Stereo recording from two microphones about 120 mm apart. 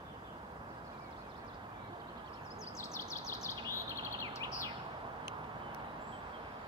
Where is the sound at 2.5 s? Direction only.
25° left (ahead or behind).